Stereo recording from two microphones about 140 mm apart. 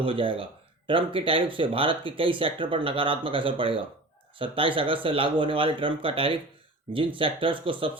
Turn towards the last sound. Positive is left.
turn(degrees=-40)  # may be behind; listen again after turning